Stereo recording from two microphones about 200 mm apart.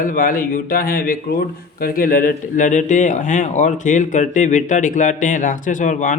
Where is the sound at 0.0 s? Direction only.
45° left (ahead or behind).